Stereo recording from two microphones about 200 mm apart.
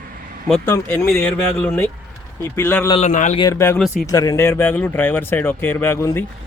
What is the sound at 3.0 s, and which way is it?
Speech, 35° left (ahead or behind).